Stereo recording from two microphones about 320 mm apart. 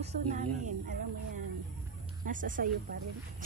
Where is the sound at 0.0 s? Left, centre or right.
Right.